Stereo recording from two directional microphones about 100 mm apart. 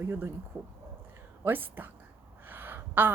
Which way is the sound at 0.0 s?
25° right (ahead or behind).